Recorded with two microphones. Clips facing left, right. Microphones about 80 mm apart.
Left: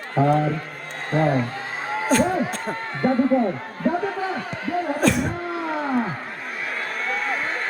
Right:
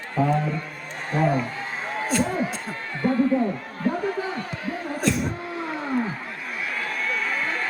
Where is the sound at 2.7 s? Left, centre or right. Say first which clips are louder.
Left 2 dB; left.